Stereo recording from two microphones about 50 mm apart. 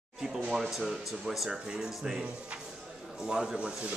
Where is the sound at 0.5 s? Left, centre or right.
Centre.